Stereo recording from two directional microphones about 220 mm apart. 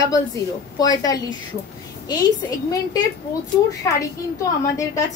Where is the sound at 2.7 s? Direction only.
15° left (ahead or behind).